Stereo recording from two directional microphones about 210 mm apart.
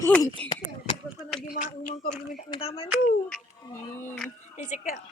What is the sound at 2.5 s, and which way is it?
Speech, 25° left (ahead or behind).